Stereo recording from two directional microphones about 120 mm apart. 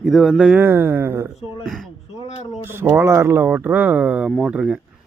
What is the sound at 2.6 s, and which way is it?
Speech, 20° right (ahead or behind).